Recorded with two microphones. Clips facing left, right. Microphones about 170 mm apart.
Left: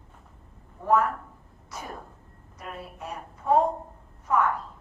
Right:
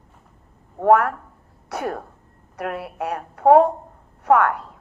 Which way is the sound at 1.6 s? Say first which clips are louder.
Right 12 dB; 70° right (ahead or behind).